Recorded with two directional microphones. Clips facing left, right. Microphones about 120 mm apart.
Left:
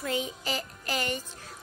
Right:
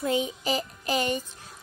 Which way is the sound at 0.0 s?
20° right (ahead or behind).